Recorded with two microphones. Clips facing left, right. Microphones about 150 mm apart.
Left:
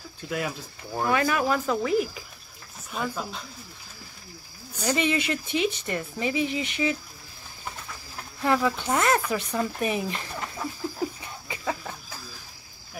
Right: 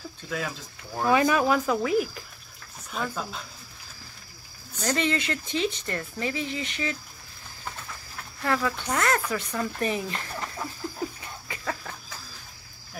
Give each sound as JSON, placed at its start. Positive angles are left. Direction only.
{"t": 0.3, "sound": "speech", "side_deg": 10}
{"t": 1.0, "sound": "speech", "side_deg": -20}
{"t": 1.5, "sound": "speech", "side_deg": 0}
{"t": 4.7, "sound": "speech", "side_deg": 10}
{"t": 8.4, "sound": "speech", "side_deg": 15}
{"t": 11.4, "sound": "a sound", "side_deg": 15}